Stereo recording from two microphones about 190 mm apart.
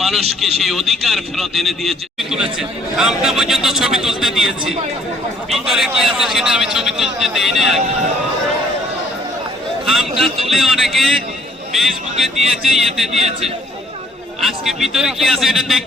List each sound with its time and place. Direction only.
0.6 s speech: centre (ahead or behind)
9.8 s speech: centre (ahead or behind)
13.1 s speech: 35° right (ahead or behind)
14.4 s speech: centre (ahead or behind)